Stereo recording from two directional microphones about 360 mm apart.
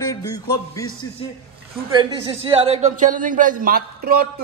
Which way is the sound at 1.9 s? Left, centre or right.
Centre.